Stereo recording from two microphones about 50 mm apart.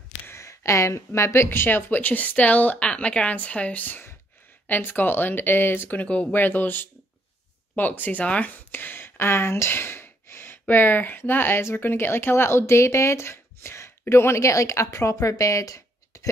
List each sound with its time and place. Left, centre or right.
0.3 s a woman's voice: left
5.9 s speech: left
6.3 s a woman's voice: left
8.7 s sigh: left
10.7 s speech: left